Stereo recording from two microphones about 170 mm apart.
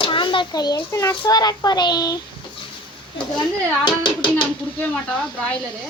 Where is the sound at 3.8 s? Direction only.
25° left (ahead or behind).